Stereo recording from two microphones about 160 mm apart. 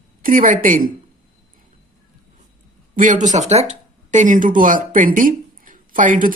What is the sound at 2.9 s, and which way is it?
A man's voice, 55° right (ahead or behind).